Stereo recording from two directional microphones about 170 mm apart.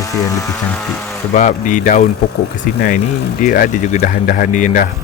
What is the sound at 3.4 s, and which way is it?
Speech, 50° left (ahead or behind).